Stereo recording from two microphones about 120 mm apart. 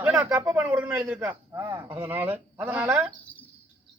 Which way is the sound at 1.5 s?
30° right (ahead or behind).